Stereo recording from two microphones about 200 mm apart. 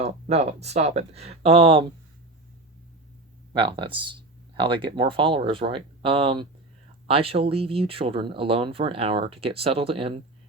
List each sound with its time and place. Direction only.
0.0 s speech: 30° right (ahead or behind)
3.5 s speech: 25° right (ahead or behind)